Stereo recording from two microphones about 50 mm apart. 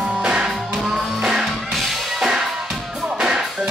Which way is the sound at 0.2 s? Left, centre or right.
Centre.